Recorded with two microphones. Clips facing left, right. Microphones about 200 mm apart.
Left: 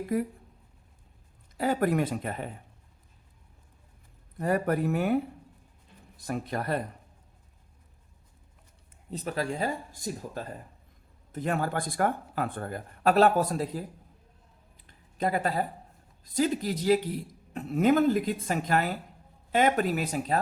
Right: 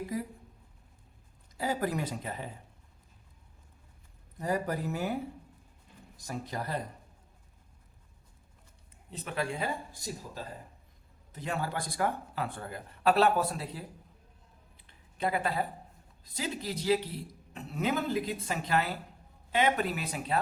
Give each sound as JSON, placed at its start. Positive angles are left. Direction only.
{"t": 0.1, "sound": "speech", "side_deg": 55}
{"t": 1.5, "sound": "speech", "side_deg": 60}
{"t": 4.4, "sound": "speech", "side_deg": 60}
{"t": 9.0, "sound": "speech", "side_deg": 40}
{"t": 14.8, "sound": "a sound", "side_deg": 45}
{"t": 16.2, "sound": "speech", "side_deg": 45}